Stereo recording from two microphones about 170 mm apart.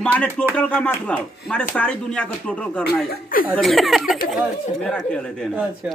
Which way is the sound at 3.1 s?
55° left (ahead or behind).